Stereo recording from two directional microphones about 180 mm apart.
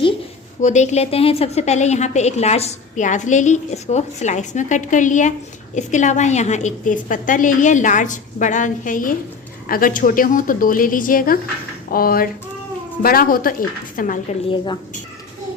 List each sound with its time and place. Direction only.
0.6 s a woman's voice: 40° left (ahead or behind)
14.4 s speech: 25° left (ahead or behind)